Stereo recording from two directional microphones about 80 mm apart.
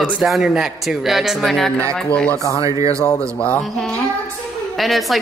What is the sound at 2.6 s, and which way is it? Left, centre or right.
Speech, right.